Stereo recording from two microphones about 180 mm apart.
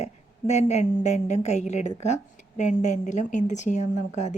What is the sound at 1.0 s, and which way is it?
A woman's voice, 40° left (ahead or behind).